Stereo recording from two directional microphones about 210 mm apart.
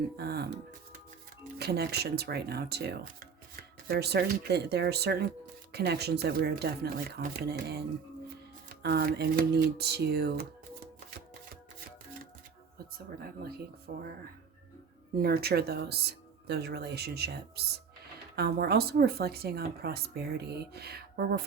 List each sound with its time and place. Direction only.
0.2 s speech: 50° right (ahead or behind)
1.5 s speech: 50° right (ahead or behind)
13.4 s speech: 50° right (ahead or behind)
15.2 s speech: 45° right (ahead or behind)